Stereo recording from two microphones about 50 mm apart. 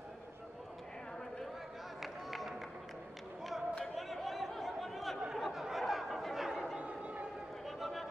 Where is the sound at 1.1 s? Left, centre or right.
Centre.